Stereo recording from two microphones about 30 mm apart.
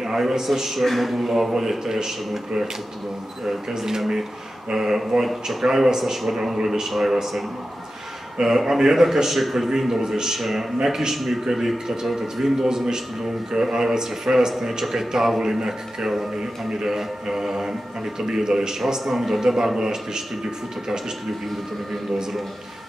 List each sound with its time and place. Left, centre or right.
0.0 s speech: centre
3.4 s speech: centre
8.4 s speech: centre
9.7 s speech: centre
16.8 s speech: centre